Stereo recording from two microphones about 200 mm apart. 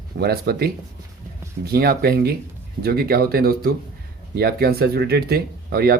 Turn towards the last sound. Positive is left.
turn(degrees=-50)  # may be behind; listen again after turning